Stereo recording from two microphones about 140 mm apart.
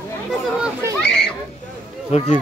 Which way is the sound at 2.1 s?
55° left (ahead or behind).